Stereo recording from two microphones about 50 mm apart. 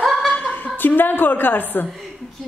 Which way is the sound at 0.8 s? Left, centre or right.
Left.